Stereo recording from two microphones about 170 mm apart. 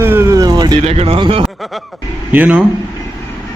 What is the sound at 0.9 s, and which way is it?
Speech, 35° right (ahead or behind).